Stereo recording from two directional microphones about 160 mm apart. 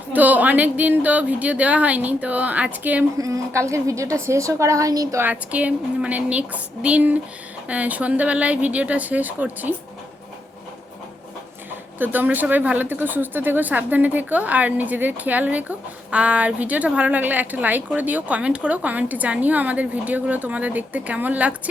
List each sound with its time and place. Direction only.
0.1 s a woman's voice: 10° right (ahead or behind)
3.2 s a woman's voice: 20° right (ahead or behind)
5.2 s a woman's voice: 10° right (ahead or behind)
11.9 s a woman's voice: 10° right (ahead or behind)